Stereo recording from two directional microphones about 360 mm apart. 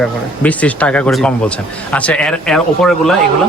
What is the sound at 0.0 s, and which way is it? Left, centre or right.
A man's voice, centre.